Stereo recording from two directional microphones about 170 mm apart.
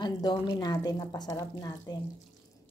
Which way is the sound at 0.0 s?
25° left (ahead or behind).